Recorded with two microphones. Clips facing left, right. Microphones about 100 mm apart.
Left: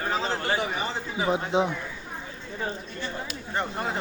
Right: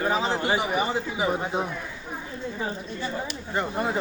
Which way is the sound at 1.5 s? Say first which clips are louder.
Left 4 dB; 20° left (ahead or behind).